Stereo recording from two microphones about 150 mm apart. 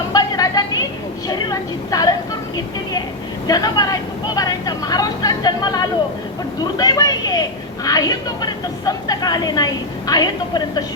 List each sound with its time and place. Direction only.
0.1 s a sound: 25° left (ahead or behind)
1.3 s a woman's voice: 25° left (ahead or behind)
3.4 s speech: 25° left (ahead or behind)